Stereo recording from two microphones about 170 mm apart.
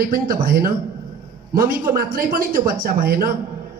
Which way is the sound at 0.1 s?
60° right (ahead or behind).